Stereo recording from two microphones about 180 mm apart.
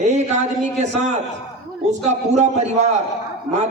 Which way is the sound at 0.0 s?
40° right (ahead or behind).